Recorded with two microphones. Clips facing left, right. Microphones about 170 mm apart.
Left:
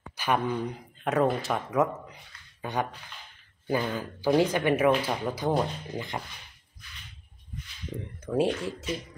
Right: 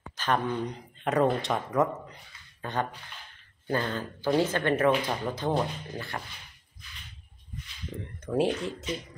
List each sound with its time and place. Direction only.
0.2 s speech: 10° left (ahead or behind)
8.3 s speech: centre (ahead or behind)